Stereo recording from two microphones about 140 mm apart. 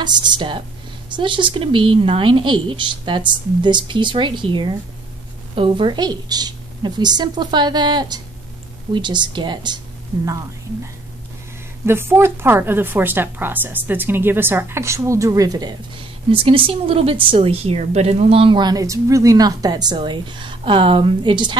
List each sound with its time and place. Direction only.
0.0 s a woman's voice: 30° right (ahead or behind)
16.3 s a woman's voice: 40° right (ahead or behind)